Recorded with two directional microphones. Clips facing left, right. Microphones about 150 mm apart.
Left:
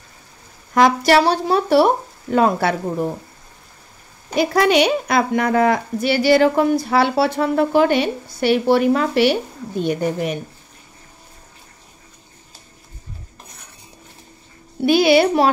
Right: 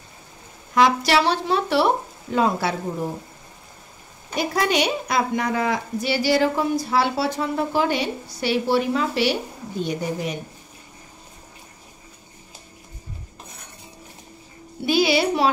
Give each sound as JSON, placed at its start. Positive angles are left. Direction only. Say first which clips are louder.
{"t": 0.7, "sound": "speech", "louder": "left 4 dB", "side_deg": 50}
{"t": 2.3, "sound": "a woman's voice", "louder": "left 5 dB", "side_deg": 55}
{"t": 4.4, "sound": "a woman's voice", "louder": "left 6 dB", "side_deg": 75}
{"t": 14.9, "sound": "a woman's voice", "louder": "left 6 dB", "side_deg": 55}